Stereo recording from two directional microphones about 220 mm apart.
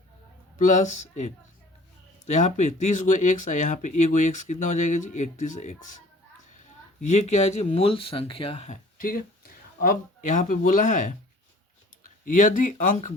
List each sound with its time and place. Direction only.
0.6 s speech: 30° left (ahead or behind)
7.0 s speech: 30° left (ahead or behind)
12.2 s speech: 35° left (ahead or behind)